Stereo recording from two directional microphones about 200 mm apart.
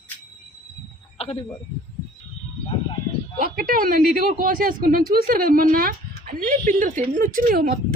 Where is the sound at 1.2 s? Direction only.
30° left (ahead or behind).